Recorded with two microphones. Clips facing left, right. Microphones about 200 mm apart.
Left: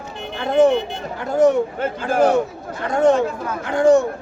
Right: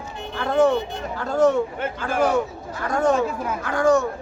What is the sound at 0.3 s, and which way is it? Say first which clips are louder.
Vehicle: left 3 dB; 20° left (ahead or behind).